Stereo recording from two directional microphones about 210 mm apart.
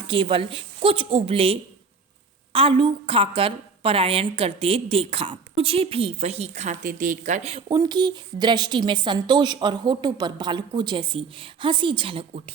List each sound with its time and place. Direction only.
0.1 s a woman's voice: 25° right (ahead or behind)